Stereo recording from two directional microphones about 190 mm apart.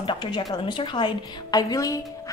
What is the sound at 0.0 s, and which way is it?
A woman's voice, 25° left (ahead or behind).